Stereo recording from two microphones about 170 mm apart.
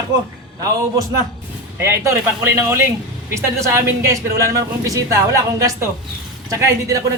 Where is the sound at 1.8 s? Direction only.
15° right (ahead or behind).